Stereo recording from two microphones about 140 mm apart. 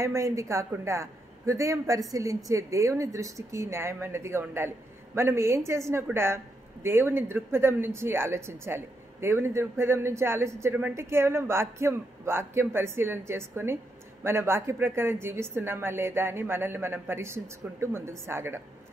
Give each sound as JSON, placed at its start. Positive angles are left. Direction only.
{"t": 0.0, "sound": "a woman's voice", "side_deg": -20}